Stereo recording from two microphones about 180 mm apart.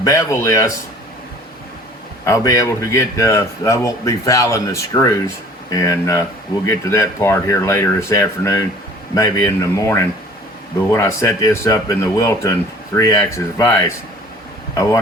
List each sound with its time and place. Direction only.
0.0 s speech: 15° left (ahead or behind)
2.2 s speech: 15° left (ahead or behind)